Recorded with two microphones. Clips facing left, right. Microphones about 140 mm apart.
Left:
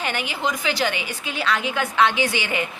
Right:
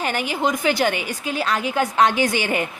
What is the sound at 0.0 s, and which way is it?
A woman's voice, 40° right (ahead or behind).